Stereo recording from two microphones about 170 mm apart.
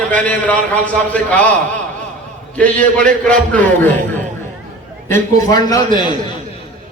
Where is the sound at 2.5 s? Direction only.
10° left (ahead or behind).